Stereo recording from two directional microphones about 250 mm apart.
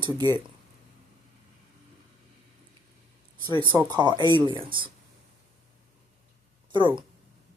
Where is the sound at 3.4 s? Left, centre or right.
Centre.